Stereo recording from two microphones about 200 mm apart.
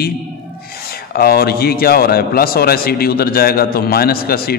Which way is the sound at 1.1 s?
50° left (ahead or behind).